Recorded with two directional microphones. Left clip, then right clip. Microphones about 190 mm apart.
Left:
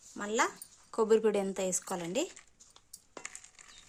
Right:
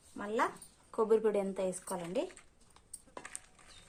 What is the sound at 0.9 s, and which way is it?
Speech, 55° left (ahead or behind).